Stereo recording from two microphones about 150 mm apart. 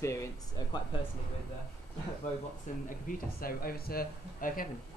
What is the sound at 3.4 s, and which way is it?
Speech, 75° left (ahead or behind).